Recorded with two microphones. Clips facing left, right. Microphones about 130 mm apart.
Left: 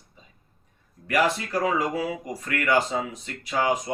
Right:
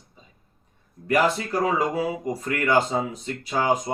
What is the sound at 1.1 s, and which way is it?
Speech, 30° right (ahead or behind).